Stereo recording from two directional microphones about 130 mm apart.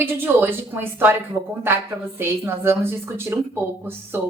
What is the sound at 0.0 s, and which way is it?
A woman's voice, 15° right (ahead or behind).